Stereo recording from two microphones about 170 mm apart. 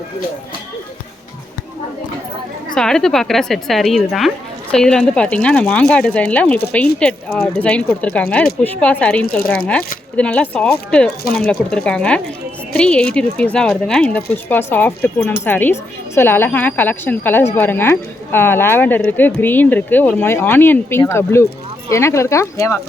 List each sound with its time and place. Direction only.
2.7 s a woman's voice: 5° left (ahead or behind)